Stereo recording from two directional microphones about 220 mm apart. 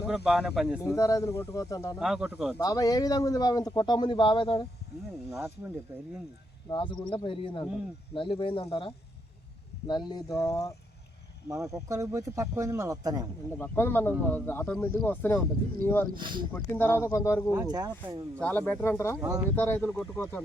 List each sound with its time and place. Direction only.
0.0 s speech: centre (ahead or behind)
0.9 s speech: 15° left (ahead or behind)
2.0 s speech: centre (ahead or behind)
2.6 s speech: 15° left (ahead or behind)
6.7 s speech: 20° left (ahead or behind)
11.4 s speech: 15° right (ahead or behind)
13.6 s speech: 10° left (ahead or behind)
16.1 s speech: 20° right (ahead or behind)
16.5 s speech: 10° left (ahead or behind)
17.5 s speech: 15° right (ahead or behind)
18.3 s speech: 10° left (ahead or behind)